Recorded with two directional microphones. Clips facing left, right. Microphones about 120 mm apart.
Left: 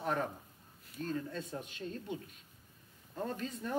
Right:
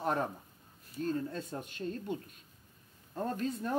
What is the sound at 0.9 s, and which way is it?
Speech, 40° right (ahead or behind).